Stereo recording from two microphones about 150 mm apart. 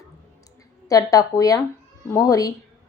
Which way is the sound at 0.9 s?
25° left (ahead or behind).